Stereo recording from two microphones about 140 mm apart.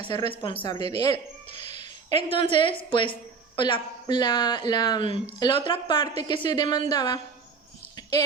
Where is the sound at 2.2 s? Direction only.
40° left (ahead or behind).